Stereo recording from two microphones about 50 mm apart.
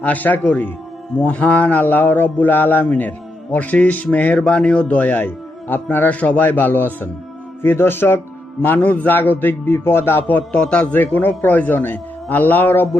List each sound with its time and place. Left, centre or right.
0.0 s a man's voice: left
1.1 s a man's voice: left
4.4 s a man's voice: left
6.1 s a man's voice: left
8.6 s a man's voice: left
10.5 s a man's voice: left
10.9 s a man's voice: left